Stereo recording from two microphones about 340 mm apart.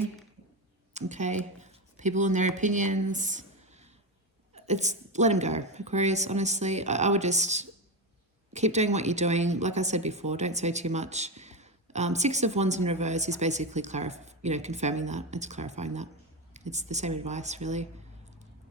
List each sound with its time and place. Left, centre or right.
0.9 s speech: right